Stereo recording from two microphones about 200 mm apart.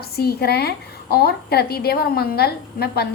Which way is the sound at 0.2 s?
50° left (ahead or behind).